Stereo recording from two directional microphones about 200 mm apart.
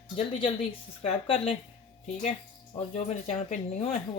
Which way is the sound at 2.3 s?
30° left (ahead or behind).